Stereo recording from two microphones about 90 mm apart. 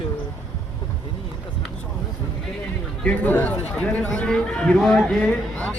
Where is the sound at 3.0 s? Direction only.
10° left (ahead or behind).